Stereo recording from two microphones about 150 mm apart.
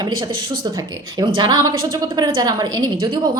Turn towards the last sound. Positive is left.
turn(degrees=-25)  # may be behind; listen again after turning